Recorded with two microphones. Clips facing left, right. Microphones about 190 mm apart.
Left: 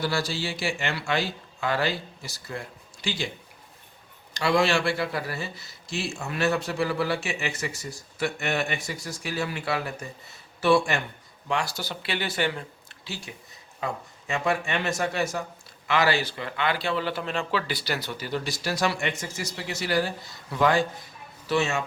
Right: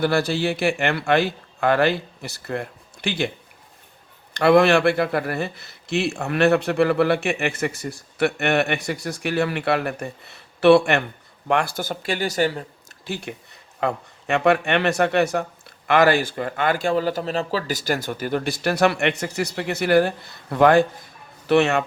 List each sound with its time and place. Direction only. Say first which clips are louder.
0.0 s speech: right 8 dB; 60° right (ahead or behind)
4.4 s speech: right 8 dB; 55° right (ahead or behind); by 12.6 s 40° right (ahead or behind)
13.1 s a man's voice: right 8 dB; 60° right (ahead or behind)